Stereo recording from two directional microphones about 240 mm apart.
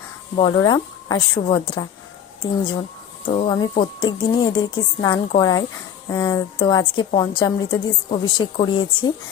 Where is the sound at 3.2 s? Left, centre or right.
Left.